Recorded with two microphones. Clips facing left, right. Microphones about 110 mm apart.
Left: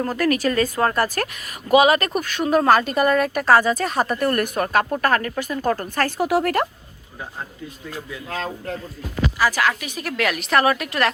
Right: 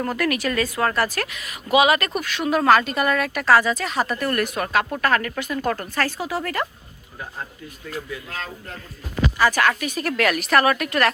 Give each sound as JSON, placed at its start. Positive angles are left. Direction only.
{"t": 0.0, "sound": "speech", "side_deg": 35}
{"t": 1.1, "sound": "speech", "side_deg": 45}
{"t": 5.9, "sound": "speech", "side_deg": 50}
{"t": 9.4, "sound": "a woman's voice", "side_deg": 10}